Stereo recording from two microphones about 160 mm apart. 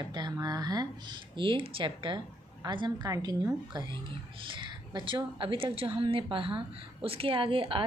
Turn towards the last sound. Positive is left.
turn(degrees=-35)  # may be behind; listen again after turning